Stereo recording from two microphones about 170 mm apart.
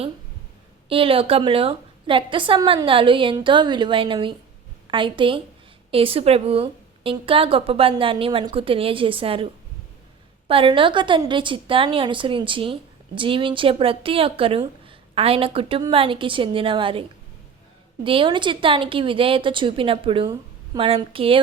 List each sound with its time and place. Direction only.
0.9 s a woman's voice: 35° right (ahead or behind)
10.5 s a woman's voice: 30° right (ahead or behind)